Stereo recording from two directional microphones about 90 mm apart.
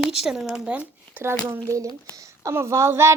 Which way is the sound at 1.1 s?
20° right (ahead or behind).